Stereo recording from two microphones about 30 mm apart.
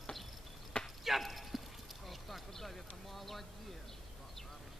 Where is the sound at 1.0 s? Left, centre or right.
Centre.